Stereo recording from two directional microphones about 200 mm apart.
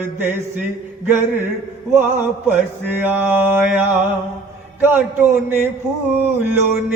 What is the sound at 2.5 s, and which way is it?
Speech, 10° right (ahead or behind).